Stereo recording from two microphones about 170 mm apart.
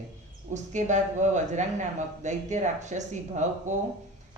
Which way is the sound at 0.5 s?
45° right (ahead or behind).